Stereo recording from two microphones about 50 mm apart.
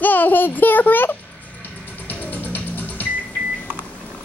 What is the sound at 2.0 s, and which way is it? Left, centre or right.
Music, left.